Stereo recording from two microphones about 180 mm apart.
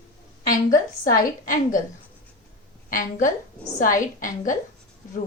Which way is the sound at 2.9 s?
50° left (ahead or behind).